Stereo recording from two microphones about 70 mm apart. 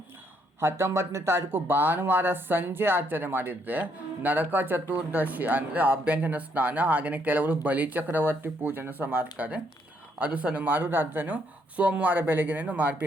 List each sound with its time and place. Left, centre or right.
0.6 s speech: right